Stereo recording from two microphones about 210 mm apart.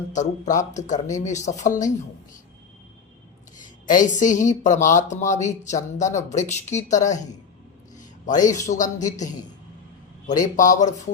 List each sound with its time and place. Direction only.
0.1 s speech: 35° left (ahead or behind)
3.6 s speech: 40° left (ahead or behind)
7.9 s a sound: 35° left (ahead or behind)
8.6 s speech: 35° left (ahead or behind)